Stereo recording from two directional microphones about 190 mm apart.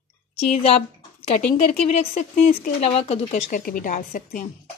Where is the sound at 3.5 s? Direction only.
45° left (ahead or behind).